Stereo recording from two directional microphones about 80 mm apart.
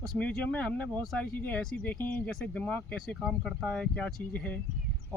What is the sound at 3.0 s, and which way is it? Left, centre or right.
Speech, centre.